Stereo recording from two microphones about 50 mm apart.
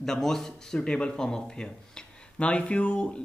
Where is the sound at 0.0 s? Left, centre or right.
Centre.